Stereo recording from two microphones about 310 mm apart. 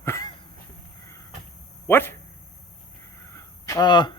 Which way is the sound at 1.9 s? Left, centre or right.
Centre.